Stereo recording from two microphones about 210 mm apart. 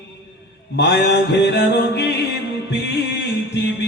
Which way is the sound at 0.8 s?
55° left (ahead or behind).